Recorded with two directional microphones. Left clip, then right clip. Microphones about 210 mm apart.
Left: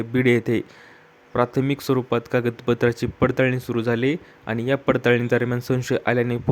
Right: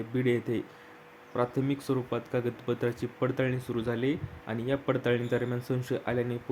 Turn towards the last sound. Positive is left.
turn(degrees=35)  # may be behind; listen again after turning